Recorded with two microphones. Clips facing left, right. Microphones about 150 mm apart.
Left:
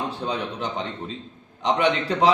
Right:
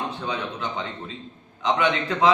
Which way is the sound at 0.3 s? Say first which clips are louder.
Left 1 dB; 35° left (ahead or behind).